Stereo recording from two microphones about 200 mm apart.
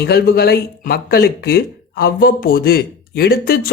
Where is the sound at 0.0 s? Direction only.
50° left (ahead or behind).